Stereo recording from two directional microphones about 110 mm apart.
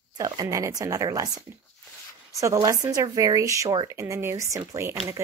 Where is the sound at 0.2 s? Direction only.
35° right (ahead or behind).